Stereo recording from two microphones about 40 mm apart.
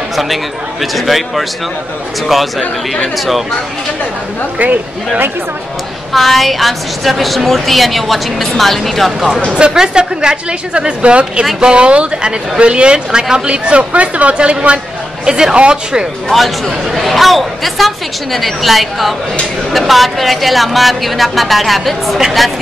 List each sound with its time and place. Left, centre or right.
0.1 s a woman's voice: centre
6.1 s a woman's voice: centre
9.8 s speech: centre
15.2 s speech: centre
16.3 s a woman's voice: centre